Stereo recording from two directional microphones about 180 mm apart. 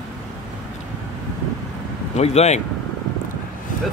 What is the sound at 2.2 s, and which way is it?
Speech, 35° left (ahead or behind).